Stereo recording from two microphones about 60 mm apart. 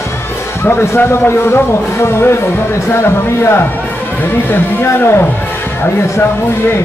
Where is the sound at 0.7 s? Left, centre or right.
Left.